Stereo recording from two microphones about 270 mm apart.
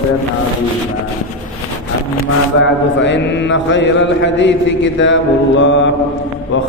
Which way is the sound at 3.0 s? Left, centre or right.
Left.